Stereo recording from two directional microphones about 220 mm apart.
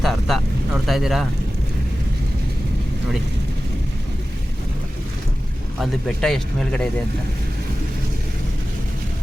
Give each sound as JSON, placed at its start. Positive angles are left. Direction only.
{"t": 0.0, "sound": "speech", "side_deg": 0}
{"t": 5.8, "sound": "speech", "side_deg": 0}